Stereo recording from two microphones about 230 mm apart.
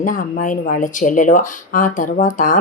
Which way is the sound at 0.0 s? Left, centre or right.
Left.